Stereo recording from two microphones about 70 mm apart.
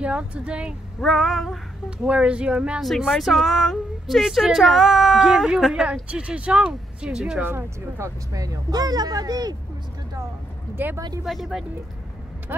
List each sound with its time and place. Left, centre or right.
0.0 s speech: centre
1.0 s a woman's voice: centre
1.9 s speech: centre
3.1 s a woman's voice: centre
7.4 s speech: right
8.3 s speech: right
10.8 s speech: right
11.2 s a woman's voice: centre